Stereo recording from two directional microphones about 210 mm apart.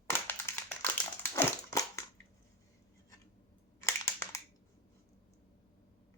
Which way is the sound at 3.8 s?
15° left (ahead or behind).